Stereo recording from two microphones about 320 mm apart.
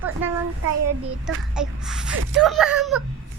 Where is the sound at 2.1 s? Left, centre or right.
Right.